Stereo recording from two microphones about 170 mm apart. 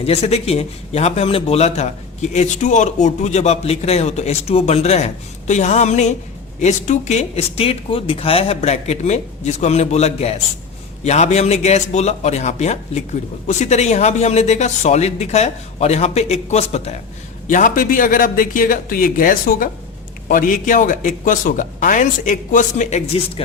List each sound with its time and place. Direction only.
0.0 s a man's voice: 35° left (ahead or behind)
17.5 s speech: 50° left (ahead or behind)